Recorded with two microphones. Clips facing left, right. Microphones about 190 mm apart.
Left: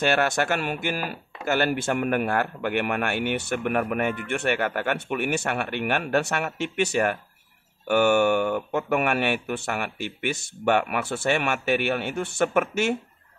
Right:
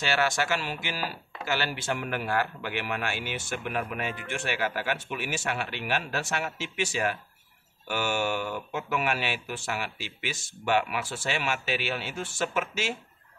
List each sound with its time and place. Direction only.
0.0 s speech: 55° left (ahead or behind)